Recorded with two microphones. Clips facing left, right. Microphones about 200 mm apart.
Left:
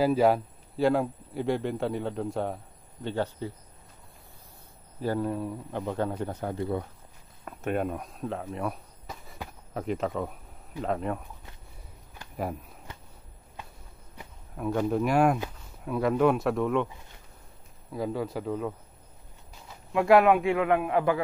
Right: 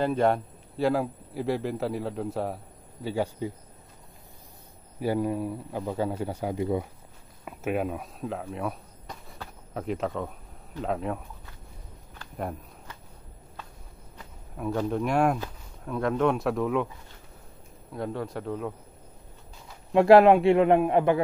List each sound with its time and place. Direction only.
0.0 s a man's voice: 5° left (ahead or behind); by 3.5 s 10° right (ahead or behind)
5.0 s a man's voice: 10° right (ahead or behind)
7.4 s a sound: 5° right (ahead or behind)
9.8 s a man's voice: centre (ahead or behind)
14.6 s a man's voice: centre (ahead or behind)
17.9 s a man's voice: centre (ahead or behind)
19.9 s a man's voice: 35° right (ahead or behind)